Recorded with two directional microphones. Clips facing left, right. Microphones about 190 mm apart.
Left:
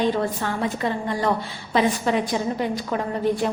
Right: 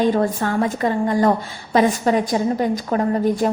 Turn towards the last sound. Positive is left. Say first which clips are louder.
# right 4 dB
turn(degrees=-45)  # may be behind; listen again after turning